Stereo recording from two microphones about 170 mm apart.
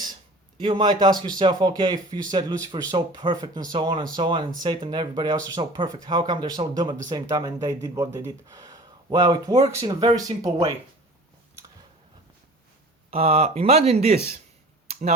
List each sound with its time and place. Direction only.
0.6 s speech: 25° right (ahead or behind)
13.1 s speech: 35° right (ahead or behind)